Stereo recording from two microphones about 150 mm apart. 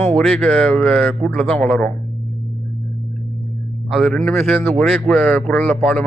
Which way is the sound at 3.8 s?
Centre (ahead or behind).